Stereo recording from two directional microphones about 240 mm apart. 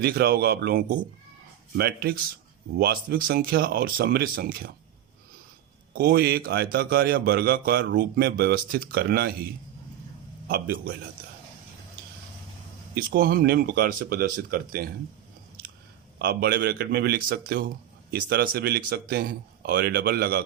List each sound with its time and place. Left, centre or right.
0.0 s a man's voice: right
5.9 s a man's voice: right
10.5 s a man's voice: right
12.9 s a man's voice: right
16.1 s a man's voice: right